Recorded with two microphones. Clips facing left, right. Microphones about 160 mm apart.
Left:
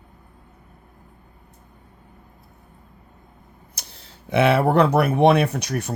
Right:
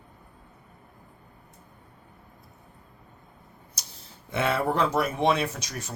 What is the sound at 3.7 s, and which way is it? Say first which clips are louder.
Speech: left 4 dB; 65° left (ahead or behind).